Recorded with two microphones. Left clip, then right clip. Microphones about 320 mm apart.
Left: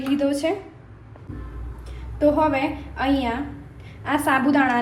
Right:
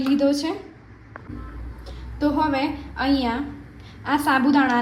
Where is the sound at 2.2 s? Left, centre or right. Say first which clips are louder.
Left 3 dB; centre.